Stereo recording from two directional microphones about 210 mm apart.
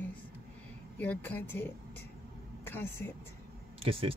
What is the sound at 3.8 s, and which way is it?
Speech, 25° right (ahead or behind).